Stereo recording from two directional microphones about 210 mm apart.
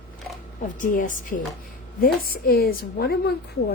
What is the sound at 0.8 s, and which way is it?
Speech, 40° left (ahead or behind).